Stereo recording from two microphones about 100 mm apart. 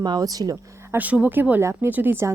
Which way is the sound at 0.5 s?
20° right (ahead or behind).